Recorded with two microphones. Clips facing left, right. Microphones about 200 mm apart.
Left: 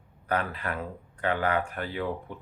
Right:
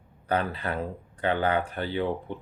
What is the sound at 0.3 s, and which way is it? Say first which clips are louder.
Speech: right 2 dB; 30° right (ahead or behind).